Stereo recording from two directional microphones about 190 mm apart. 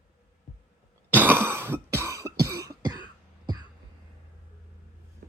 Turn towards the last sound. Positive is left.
turn(degrees=-20)  # may be behind; listen again after turning